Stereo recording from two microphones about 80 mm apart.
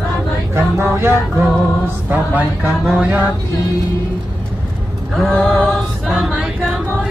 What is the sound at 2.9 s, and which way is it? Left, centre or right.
Music, centre.